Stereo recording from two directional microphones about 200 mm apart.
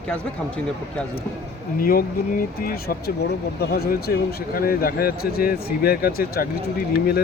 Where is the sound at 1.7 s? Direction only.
45° left (ahead or behind).